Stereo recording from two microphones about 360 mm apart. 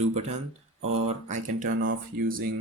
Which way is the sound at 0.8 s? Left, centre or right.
Right.